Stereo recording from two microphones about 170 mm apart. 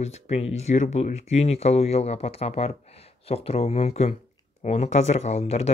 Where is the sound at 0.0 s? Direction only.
40° left (ahead or behind).